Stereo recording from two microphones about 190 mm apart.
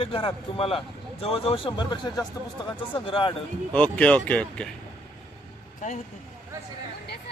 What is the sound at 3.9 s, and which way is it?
Speech, 5° left (ahead or behind).